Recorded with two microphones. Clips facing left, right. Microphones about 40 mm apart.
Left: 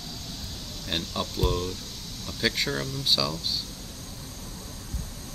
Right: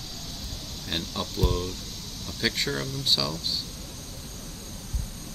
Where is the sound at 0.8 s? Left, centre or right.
Centre.